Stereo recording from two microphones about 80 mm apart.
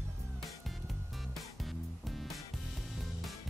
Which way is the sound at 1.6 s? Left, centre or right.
Centre.